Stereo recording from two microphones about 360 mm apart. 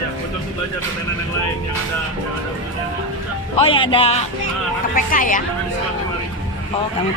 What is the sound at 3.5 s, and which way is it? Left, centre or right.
Speech, centre.